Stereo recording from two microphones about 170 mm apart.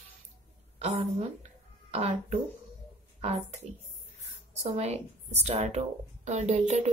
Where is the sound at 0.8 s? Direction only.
40° right (ahead or behind).